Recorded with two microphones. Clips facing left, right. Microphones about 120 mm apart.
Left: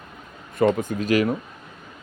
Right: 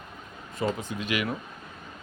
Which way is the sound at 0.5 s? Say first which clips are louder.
Left 9 dB; 55° left (ahead or behind).